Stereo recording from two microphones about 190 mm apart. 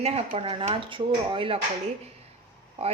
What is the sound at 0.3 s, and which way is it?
Speech, 30° right (ahead or behind).